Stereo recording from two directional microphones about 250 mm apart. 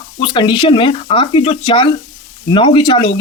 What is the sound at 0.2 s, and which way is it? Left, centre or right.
A man's voice, centre.